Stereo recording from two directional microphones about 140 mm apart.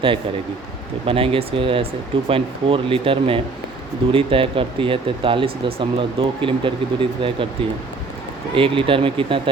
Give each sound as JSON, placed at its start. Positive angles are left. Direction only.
{"t": 1.0, "sound": "speech", "side_deg": -40}
{"t": 8.5, "sound": "speech", "side_deg": -40}